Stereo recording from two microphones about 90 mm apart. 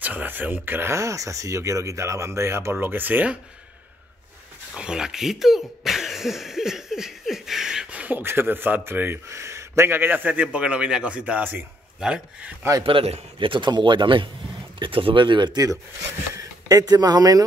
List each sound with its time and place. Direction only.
0.0 s speech: 20° right (ahead or behind)
4.7 s speech: 10° right (ahead or behind)
12.8 s a man's voice: 75° right (ahead or behind)
14.8 s a man's voice: 80° right; by 15.6 s 60° right (ahead or behind)
16.3 s speech: 40° right (ahead or behind)